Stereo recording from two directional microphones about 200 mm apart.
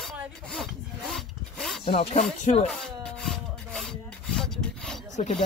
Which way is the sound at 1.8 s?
30° left (ahead or behind).